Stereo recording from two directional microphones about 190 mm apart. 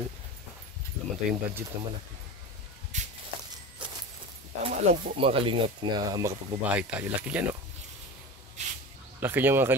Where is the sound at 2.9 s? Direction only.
40° right (ahead or behind).